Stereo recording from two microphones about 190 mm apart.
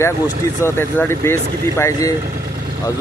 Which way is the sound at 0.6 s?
10° left (ahead or behind).